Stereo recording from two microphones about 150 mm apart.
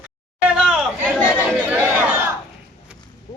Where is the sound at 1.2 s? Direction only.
10° right (ahead or behind).